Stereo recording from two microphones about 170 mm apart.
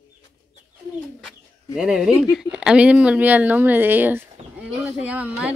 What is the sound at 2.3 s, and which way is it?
Speech, 5° right (ahead or behind).